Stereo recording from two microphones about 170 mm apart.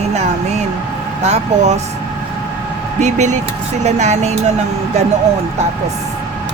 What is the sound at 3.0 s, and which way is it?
Speech, 45° right (ahead or behind).